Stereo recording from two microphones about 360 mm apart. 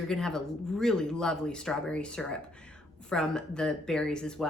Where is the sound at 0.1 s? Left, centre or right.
Centre.